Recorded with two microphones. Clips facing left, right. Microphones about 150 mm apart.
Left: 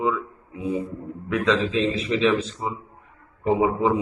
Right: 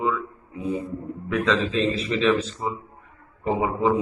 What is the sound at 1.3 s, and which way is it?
Speech, 15° left (ahead or behind).